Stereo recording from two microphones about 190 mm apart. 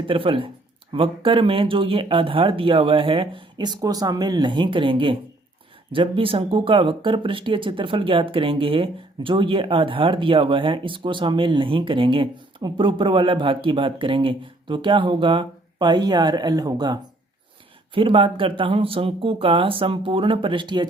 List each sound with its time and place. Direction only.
0.1 s speech: 25° right (ahead or behind)